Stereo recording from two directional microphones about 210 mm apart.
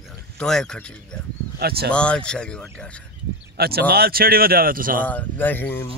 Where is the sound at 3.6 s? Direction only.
50° right (ahead or behind).